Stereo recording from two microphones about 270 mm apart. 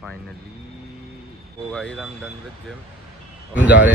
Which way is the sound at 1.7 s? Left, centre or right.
Centre.